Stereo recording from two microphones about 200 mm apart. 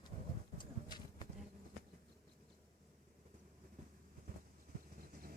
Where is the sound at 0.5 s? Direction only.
20° left (ahead or behind).